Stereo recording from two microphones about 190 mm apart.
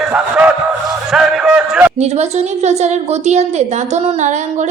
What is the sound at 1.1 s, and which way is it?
Speech, centre (ahead or behind).